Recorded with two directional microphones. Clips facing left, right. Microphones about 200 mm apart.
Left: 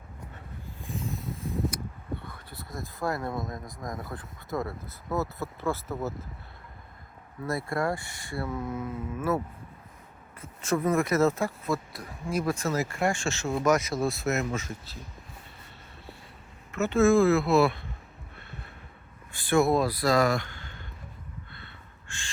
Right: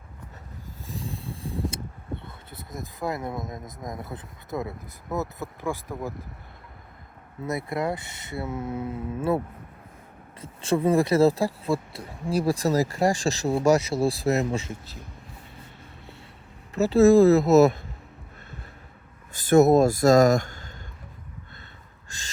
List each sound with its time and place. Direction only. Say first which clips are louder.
0.9 s a sound: left 1 dB; 35° right (ahead or behind)
5.1 s speech: even; 20° right (ahead or behind)
7.4 s speech: right 1 dB; 20° right (ahead or behind)
10.4 s speech: right 4 dB; 30° right (ahead or behind)
16.7 s speech: right 5 dB; 35° right (ahead or behind)
19.3 s speech: right 6 dB; 40° right (ahead or behind)
22.1 s a sound: even; 40° right (ahead or behind)